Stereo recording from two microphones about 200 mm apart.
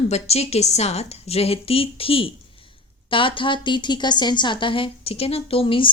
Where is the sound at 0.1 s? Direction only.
30° left (ahead or behind).